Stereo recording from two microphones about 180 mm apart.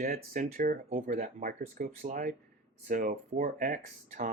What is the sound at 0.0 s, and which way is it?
Speech, 55° right (ahead or behind).